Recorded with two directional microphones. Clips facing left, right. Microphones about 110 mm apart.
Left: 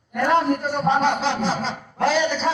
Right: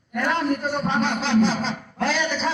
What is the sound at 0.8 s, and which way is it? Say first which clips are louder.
A man's voice: left 7 dB; 25° left (ahead or behind).